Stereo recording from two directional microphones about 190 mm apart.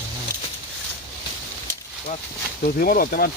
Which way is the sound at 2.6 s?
50° left (ahead or behind).